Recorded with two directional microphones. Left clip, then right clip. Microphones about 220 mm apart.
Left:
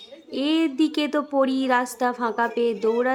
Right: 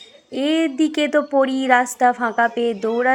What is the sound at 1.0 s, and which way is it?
A woman's voice, 10° right (ahead or behind).